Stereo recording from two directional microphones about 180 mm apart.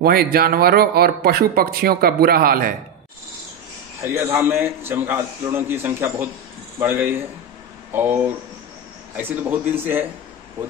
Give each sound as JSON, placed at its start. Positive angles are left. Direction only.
{"t": 0.0, "sound": "speech", "side_deg": -55}
{"t": 4.0, "sound": "a man's voice", "side_deg": -15}